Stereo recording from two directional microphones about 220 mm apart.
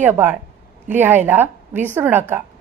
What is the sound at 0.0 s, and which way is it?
A woman's voice, 10° right (ahead or behind).